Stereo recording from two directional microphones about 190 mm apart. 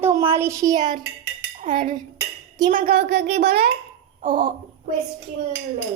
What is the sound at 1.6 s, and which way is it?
Dishes, 45° right (ahead or behind).